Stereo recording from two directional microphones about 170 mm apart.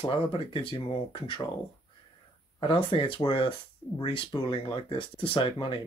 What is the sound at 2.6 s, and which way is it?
Speech, 30° left (ahead or behind).